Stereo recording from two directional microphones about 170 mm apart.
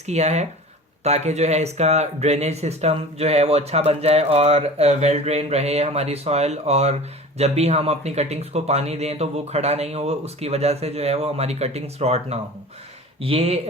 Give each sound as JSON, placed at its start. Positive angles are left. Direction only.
{"t": 0.0, "sound": "speech", "side_deg": -40}